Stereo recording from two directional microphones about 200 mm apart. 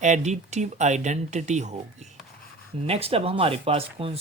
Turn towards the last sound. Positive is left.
turn(degrees=-30)  # may be behind; listen again after turning